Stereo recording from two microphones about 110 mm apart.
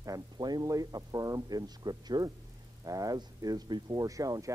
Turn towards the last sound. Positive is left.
turn(degrees=-30)  # may be behind; listen again after turning